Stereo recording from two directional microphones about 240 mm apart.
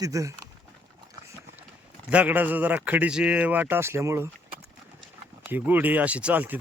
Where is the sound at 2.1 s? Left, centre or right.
Centre.